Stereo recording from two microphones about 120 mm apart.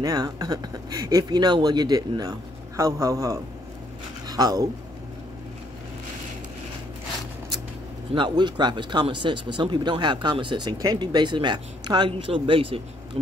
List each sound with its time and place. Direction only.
0.0 s speech: 35° right (ahead or behind)
8.1 s speech: 40° right (ahead or behind)